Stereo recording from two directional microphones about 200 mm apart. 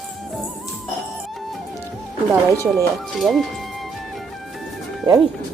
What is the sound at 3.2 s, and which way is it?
Music, centre (ahead or behind).